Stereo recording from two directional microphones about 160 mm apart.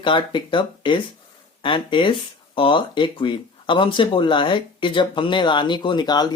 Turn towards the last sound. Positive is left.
turn(degrees=25)  # may be behind; listen again after turning